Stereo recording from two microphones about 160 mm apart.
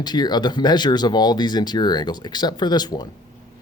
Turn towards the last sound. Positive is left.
turn(degrees=25)  # may be behind; listen again after turning